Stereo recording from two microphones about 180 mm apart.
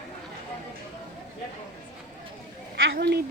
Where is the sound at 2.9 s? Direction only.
65° right (ahead or behind).